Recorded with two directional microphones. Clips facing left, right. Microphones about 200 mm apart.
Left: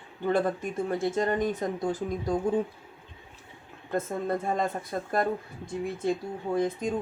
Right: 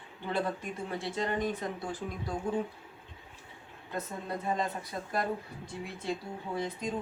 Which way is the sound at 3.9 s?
50° left (ahead or behind).